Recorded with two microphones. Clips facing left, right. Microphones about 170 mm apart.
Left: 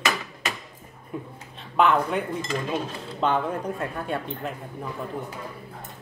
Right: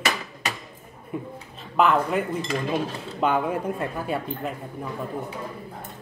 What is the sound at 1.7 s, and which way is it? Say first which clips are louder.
Speech: right 1 dB; centre (ahead or behind).